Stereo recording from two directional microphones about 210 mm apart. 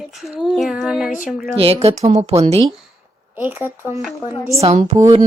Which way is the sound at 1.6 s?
30° right (ahead or behind).